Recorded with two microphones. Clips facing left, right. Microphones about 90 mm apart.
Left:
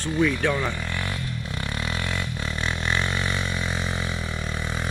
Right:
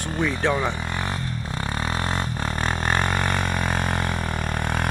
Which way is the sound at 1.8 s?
40° right (ahead or behind).